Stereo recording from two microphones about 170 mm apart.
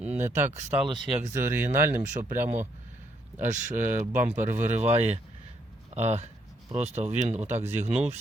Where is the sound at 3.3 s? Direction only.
45° right (ahead or behind).